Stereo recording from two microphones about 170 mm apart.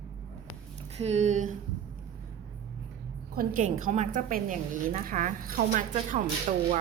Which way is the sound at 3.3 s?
55° right (ahead or behind).